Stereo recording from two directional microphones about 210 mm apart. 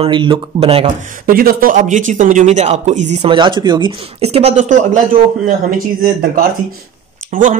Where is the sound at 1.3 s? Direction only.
45° right (ahead or behind).